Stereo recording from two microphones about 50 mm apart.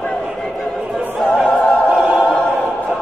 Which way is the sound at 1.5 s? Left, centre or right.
Left.